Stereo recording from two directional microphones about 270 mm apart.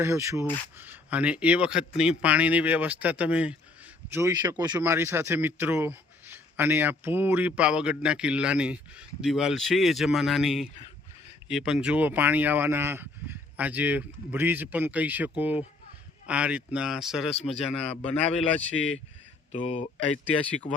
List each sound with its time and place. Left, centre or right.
0.0 s speech: centre
19.5 s speech: left
20.4 s speech: centre